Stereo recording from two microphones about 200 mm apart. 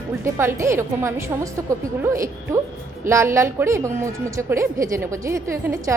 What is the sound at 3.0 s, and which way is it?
A woman's voice, 15° right (ahead or behind).